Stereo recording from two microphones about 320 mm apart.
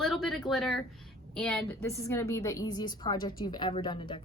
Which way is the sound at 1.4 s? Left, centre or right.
Centre.